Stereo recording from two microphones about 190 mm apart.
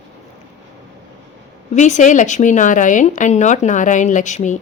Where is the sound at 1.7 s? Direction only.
40° left (ahead or behind).